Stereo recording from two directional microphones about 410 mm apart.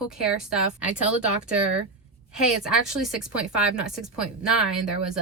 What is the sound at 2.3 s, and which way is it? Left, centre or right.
Speech, centre.